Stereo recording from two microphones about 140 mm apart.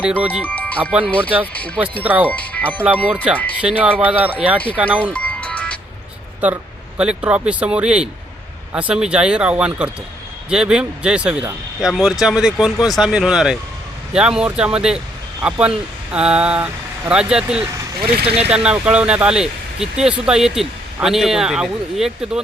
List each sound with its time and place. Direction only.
0.0 s speech: 10° right (ahead or behind)
0.4 s speech: 10° left (ahead or behind)
2.0 s speech: 10° right (ahead or behind)
2.4 s speech: 10° left (ahead or behind)
2.8 s speech: 10° right (ahead or behind)
5.1 s music: 10° left (ahead or behind)
6.4 s speech: 10° right (ahead or behind)